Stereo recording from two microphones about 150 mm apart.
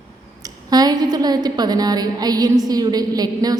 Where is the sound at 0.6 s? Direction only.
25° right (ahead or behind).